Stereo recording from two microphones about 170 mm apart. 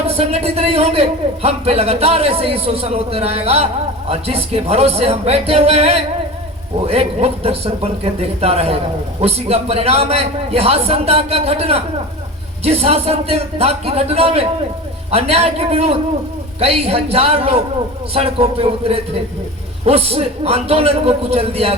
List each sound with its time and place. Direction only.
0.1 s a man's voice: 35° right (ahead or behind)